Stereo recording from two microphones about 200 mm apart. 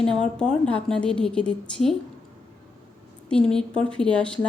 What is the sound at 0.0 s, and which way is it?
A woman's voice, 5° left (ahead or behind).